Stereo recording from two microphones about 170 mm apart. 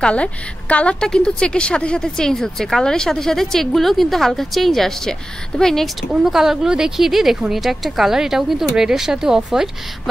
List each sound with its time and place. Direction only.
0.0 s a woman's voice: 5° left (ahead or behind)